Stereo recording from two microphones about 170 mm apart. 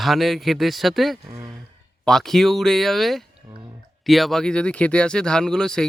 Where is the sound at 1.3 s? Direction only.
20° right (ahead or behind).